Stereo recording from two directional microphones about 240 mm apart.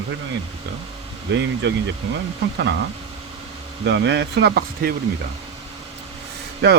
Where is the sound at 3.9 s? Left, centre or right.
Right.